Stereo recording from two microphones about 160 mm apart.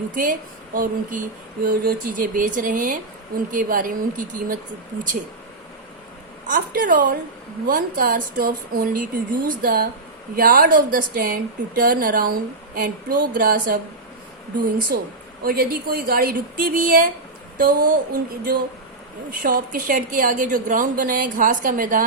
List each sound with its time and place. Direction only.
0.1 s a woman's voice: 55° right (ahead or behind)
6.5 s a woman's voice: 60° right (ahead or behind)
15.4 s a woman's voice: 70° right (ahead or behind)